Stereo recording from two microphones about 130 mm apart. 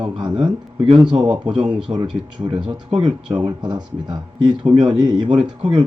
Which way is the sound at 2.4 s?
30° right (ahead or behind).